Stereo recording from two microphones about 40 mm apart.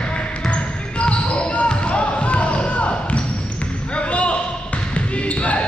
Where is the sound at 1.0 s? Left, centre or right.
Left.